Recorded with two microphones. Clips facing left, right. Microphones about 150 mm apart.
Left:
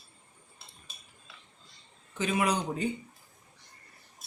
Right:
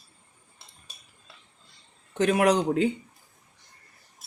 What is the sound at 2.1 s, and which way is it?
Speech, 75° right (ahead or behind).